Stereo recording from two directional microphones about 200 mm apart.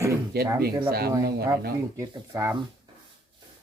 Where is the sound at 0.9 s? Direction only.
50° right (ahead or behind).